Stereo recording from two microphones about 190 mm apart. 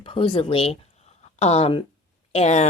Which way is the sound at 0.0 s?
25° left (ahead or behind).